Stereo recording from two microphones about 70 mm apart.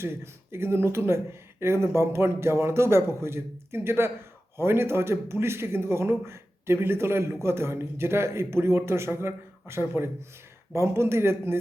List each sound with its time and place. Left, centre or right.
0.0 s speech: right